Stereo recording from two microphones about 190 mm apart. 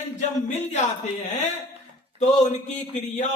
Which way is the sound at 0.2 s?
40° left (ahead or behind).